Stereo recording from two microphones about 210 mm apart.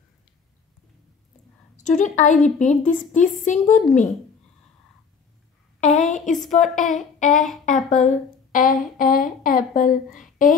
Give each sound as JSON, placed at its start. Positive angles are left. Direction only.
{"t": 1.8, "sound": "a woman's voice", "side_deg": 35}
{"t": 5.8, "sound": "a woman's voice", "side_deg": 35}
{"t": 7.3, "sound": "speech", "side_deg": 0}
{"t": 7.6, "sound": "a woman's voice", "side_deg": 35}